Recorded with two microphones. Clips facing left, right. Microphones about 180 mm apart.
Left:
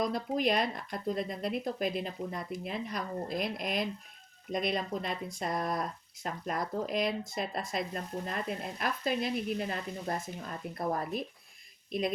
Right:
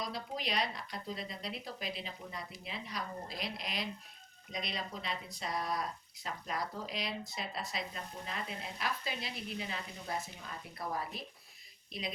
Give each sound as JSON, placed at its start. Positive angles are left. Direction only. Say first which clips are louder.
{"t": 0.0, "sound": "a woman's voice", "louder": "left 10 dB", "side_deg": 50}